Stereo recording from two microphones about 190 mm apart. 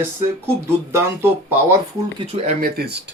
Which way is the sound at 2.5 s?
50° right (ahead or behind).